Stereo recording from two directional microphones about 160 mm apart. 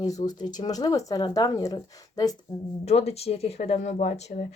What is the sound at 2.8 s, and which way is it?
Speech, 40° left (ahead or behind).